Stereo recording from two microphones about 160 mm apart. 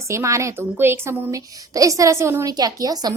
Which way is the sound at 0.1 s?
20° right (ahead or behind).